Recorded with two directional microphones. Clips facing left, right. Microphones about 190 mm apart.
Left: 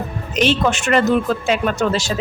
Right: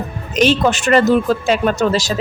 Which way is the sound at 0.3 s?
40° right (ahead or behind).